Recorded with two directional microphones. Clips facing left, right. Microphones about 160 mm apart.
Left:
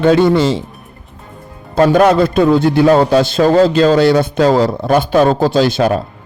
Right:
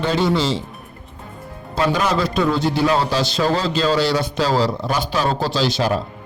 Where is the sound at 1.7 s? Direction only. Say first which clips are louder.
Left 10 dB; 55° left (ahead or behind).